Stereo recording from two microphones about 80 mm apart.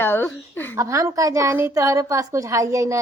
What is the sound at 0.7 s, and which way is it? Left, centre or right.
A woman's voice, right.